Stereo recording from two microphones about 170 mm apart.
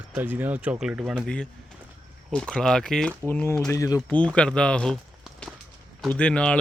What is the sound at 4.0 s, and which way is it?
Speech, 5° left (ahead or behind).